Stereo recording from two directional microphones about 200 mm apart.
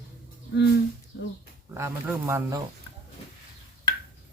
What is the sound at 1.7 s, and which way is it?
Speech, 15° right (ahead or behind).